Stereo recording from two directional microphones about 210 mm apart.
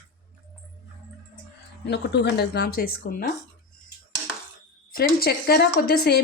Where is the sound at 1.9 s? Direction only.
55° left (ahead or behind).